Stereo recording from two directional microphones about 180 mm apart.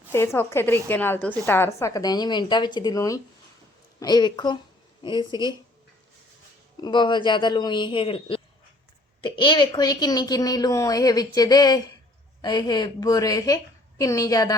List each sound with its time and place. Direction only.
0.1 s a woman's voice: 15° left (ahead or behind)
6.8 s a woman's voice: 25° left (ahead or behind)